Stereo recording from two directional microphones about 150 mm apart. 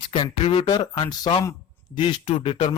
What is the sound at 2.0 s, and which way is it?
Speech, 35° left (ahead or behind).